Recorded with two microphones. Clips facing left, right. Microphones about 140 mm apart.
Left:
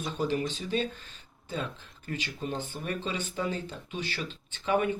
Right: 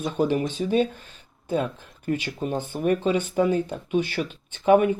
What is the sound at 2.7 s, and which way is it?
Speech, 55° right (ahead or behind).